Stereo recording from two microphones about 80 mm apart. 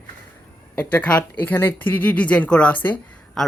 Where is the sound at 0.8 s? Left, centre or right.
Centre.